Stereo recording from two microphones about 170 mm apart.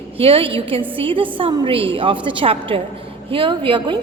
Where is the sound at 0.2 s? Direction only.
35° right (ahead or behind).